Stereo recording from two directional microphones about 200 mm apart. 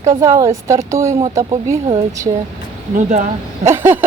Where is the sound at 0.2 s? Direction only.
15° right (ahead or behind).